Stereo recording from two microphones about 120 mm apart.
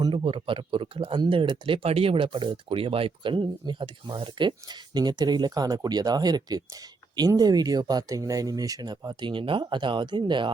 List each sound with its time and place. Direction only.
0.0 s speech: 45° right (ahead or behind)